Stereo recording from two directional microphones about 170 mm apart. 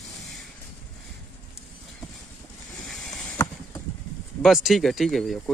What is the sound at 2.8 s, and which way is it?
Vehicle, centre (ahead or behind).